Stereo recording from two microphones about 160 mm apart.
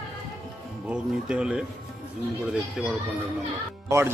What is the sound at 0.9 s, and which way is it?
Speech, 5° right (ahead or behind).